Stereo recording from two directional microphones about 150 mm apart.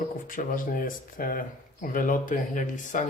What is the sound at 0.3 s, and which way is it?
Speech, 65° left (ahead or behind).